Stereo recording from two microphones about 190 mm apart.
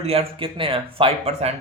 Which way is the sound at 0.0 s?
30° right (ahead or behind).